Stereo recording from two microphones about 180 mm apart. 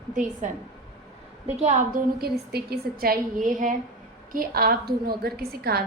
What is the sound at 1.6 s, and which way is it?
A woman's voice, 55° right (ahead or behind).